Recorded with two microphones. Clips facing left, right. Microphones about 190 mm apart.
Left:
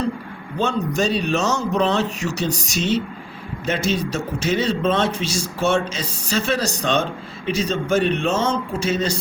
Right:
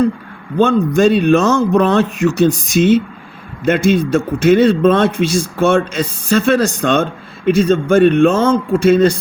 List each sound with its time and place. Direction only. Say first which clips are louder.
0.6 s a man's voice: right 10 dB; 55° right (ahead or behind)